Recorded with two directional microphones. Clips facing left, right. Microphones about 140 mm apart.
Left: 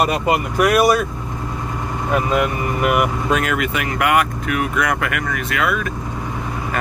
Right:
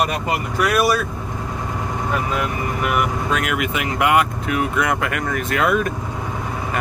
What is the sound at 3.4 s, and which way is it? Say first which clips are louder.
Speech: left 2 dB; 10° right (ahead or behind).